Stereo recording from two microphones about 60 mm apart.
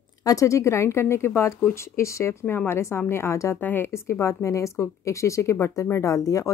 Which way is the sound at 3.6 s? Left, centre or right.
Left.